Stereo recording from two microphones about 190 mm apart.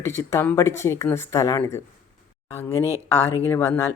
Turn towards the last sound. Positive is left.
turn(degrees=10)  # may be behind; listen again after turning